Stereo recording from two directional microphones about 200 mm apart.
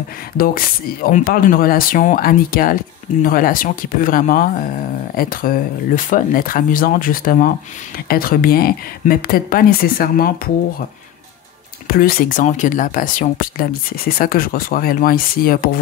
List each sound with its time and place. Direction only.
0.4 s speech: 45° left (ahead or behind)
11.9 s speech: 50° left (ahead or behind)